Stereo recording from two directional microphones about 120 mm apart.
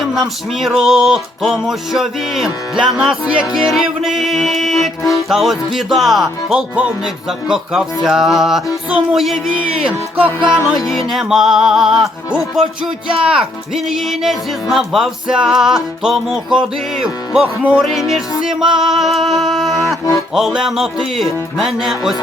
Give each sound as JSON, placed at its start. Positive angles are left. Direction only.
{"t": 0.0, "sound": "speech", "side_deg": 0}
{"t": 9.9, "sound": "music", "side_deg": -15}
{"t": 10.7, "sound": "speech", "side_deg": 0}